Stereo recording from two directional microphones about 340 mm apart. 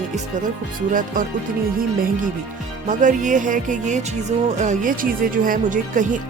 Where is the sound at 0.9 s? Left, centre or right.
Right.